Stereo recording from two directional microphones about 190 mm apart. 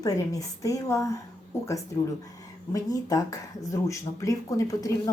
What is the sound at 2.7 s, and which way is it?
Speech, 20° left (ahead or behind).